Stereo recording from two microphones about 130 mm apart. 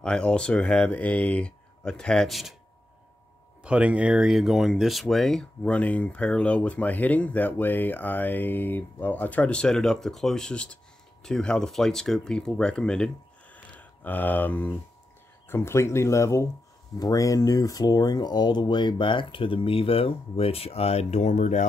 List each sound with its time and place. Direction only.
0.0 s speech: 5° left (ahead or behind)
3.6 s speech: 10° right (ahead or behind); by 21.6 s 70° left (ahead or behind)